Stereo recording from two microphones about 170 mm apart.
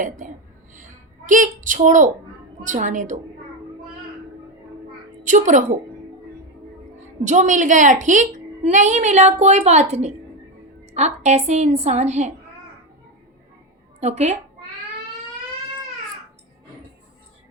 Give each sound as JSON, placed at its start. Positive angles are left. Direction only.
{"t": 1.3, "sound": "a woman's voice", "side_deg": -50}
{"t": 5.2, "sound": "a woman's voice", "side_deg": -45}
{"t": 7.3, "sound": "a woman's voice", "side_deg": -45}
{"t": 14.0, "sound": "a woman's voice", "side_deg": -40}